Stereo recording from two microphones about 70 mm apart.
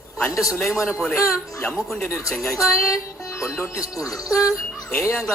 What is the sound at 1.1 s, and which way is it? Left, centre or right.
A woman's voice, left.